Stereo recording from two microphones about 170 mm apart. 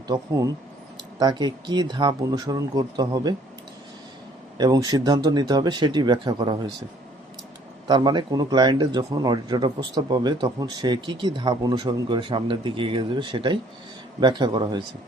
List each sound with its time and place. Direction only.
0.1 s speech: 20° right (ahead or behind)
4.5 s speech: 25° right (ahead or behind)
7.9 s speech: 25° right (ahead or behind)